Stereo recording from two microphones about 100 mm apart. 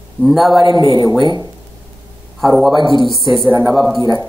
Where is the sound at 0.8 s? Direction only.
35° right (ahead or behind).